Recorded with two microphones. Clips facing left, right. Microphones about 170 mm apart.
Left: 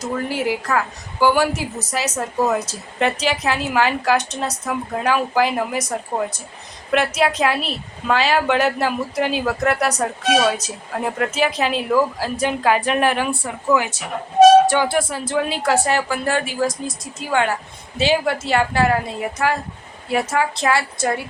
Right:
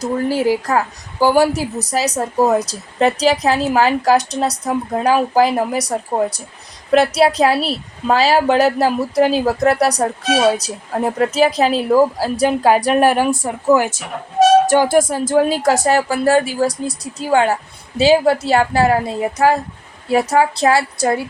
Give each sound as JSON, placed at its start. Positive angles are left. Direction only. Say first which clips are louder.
{"t": 0.0, "sound": "a woman's voice", "louder": "right 5 dB", "side_deg": -35}